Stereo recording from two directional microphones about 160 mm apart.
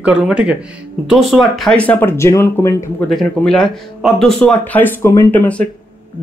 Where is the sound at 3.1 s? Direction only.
5° left (ahead or behind).